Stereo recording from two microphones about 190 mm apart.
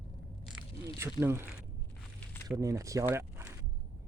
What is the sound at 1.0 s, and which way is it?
Speech, 15° right (ahead or behind).